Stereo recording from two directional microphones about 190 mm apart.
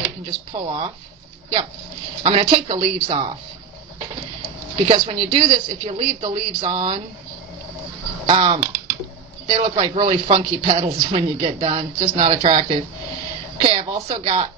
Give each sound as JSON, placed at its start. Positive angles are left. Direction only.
{"t": 0.0, "sound": "speech", "side_deg": -25}
{"t": 2.2, "sound": "a man's voice", "side_deg": -25}
{"t": 4.8, "sound": "a man's voice", "side_deg": -30}
{"t": 8.3, "sound": "a man's voice", "side_deg": -30}